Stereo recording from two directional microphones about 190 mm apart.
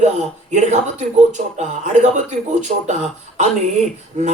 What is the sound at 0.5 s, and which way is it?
Speech, 40° right (ahead or behind).